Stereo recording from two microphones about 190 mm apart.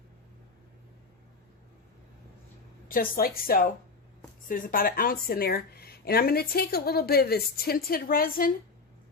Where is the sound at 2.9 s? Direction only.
50° left (ahead or behind).